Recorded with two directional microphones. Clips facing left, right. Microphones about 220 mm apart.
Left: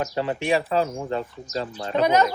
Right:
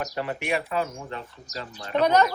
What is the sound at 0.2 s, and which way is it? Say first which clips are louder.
Speech: left 5 dB; 25° left (ahead or behind).